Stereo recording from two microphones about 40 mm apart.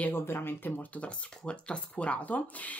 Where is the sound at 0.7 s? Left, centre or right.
Left.